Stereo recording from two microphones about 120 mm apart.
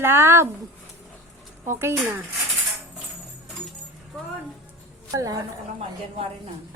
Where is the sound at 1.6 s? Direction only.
20° right (ahead or behind).